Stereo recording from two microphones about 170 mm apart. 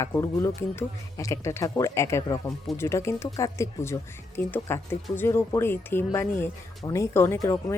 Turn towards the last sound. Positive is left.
turn(degrees=15)  # may be behind; listen again after turning